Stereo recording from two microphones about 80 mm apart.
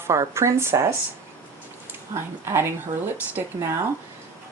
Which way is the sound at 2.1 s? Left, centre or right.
Right.